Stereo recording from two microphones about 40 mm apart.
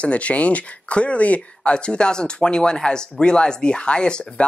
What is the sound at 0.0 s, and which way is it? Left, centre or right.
Speech, left.